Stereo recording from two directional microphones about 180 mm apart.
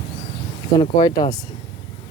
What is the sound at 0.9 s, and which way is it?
Speech, 20° left (ahead or behind).